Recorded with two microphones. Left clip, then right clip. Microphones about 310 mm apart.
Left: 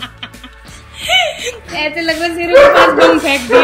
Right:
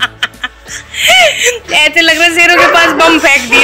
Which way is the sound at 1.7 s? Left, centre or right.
Centre.